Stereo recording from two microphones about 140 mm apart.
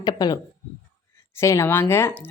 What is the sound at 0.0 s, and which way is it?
Speech, 30° left (ahead or behind).